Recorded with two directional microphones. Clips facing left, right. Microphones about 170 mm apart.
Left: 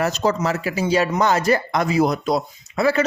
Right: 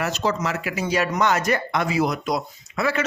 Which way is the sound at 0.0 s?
40° left (ahead or behind).